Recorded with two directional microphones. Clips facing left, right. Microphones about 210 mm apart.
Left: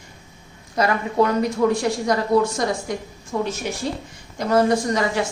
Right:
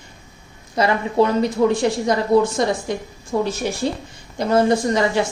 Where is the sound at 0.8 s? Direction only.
25° right (ahead or behind).